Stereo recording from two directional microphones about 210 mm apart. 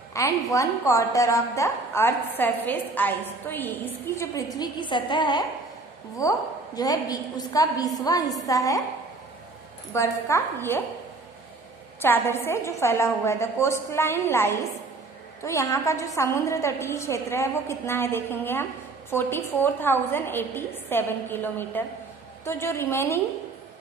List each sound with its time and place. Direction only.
0.1 s a woman's voice: 15° left (ahead or behind)
9.9 s a woman's voice: 15° left (ahead or behind)
12.0 s a woman's voice: 10° left (ahead or behind)